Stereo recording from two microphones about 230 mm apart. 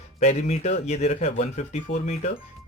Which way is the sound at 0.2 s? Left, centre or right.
Left.